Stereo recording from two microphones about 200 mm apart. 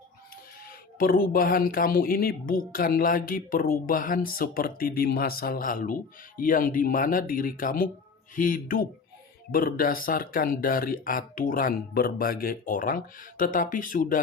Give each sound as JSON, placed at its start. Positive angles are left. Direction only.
{"t": 0.9, "sound": "speech", "side_deg": 45}